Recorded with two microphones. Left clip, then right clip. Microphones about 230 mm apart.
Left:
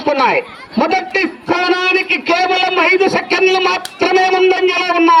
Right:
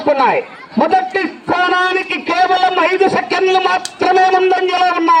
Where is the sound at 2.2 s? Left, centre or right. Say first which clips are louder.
Right 5 dB; left.